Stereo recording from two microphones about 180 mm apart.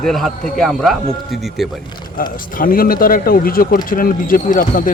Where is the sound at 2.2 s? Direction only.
50° left (ahead or behind).